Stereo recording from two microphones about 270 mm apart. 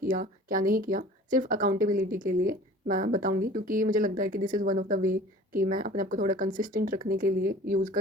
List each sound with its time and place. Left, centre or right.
0.0 s speech: right